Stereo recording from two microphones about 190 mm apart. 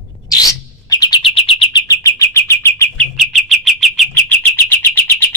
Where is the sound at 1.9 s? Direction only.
15° left (ahead or behind).